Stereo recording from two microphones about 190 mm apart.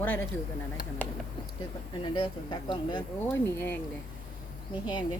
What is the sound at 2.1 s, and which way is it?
Speech, 25° left (ahead or behind).